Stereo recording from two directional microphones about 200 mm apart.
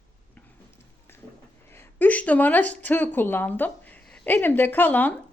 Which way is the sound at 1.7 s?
10° left (ahead or behind).